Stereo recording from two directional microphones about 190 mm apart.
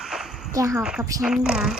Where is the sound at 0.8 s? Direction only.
5° right (ahead or behind).